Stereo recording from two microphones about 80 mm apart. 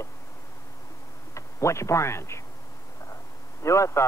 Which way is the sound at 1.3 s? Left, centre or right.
Left.